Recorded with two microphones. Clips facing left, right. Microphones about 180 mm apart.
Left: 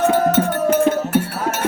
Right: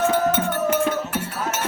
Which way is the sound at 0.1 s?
40° left (ahead or behind).